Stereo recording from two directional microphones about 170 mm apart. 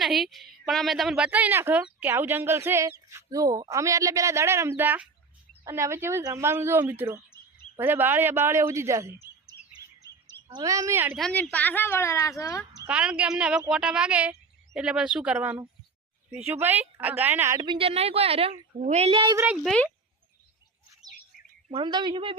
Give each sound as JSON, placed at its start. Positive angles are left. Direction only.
{"t": 0.0, "sound": "a woman's voice", "side_deg": 0}
{"t": 9.7, "sound": "chirp", "side_deg": -20}
{"t": 10.5, "sound": "speech", "side_deg": -20}
{"t": 11.2, "sound": "speech", "side_deg": 5}
{"t": 12.9, "sound": "a woman's voice", "side_deg": -5}
{"t": 17.6, "sound": "a woman's voice", "side_deg": -30}
{"t": 19.6, "sound": "speech", "side_deg": 5}
{"t": 21.7, "sound": "speech", "side_deg": -30}